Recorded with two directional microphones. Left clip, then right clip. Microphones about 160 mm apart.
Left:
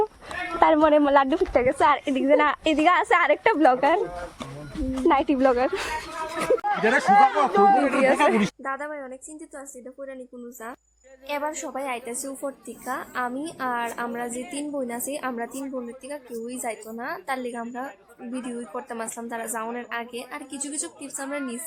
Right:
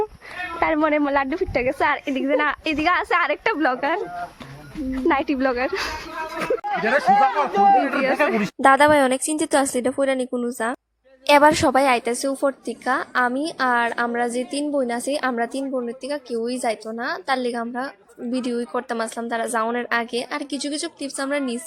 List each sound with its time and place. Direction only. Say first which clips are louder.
0.6 s a woman's voice: left 2 dB; 5° right (ahead or behind)
5.0 s speech: left 1 dB; 10° right (ahead or behind)
7.5 s a man's voice: right 2 dB; 10° left (ahead or behind)
8.6 s a woman's voice: right 17 dB; 70° right (ahead or behind)
11.3 s a woman's voice: right 15 dB; 50° right (ahead or behind); by 21.6 s 30° right (ahead or behind)